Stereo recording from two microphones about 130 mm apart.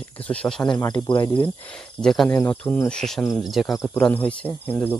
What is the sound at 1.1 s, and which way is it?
Speech, 40° left (ahead or behind).